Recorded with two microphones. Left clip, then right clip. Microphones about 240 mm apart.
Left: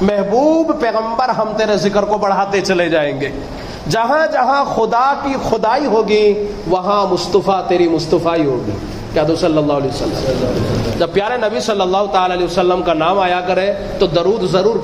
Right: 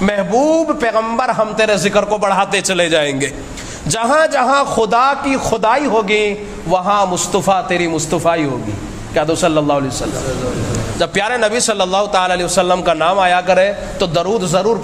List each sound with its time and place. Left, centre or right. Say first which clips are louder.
0.4 s a man's voice: right 1 dB; right
11.0 s a man's voice: right 2 dB; right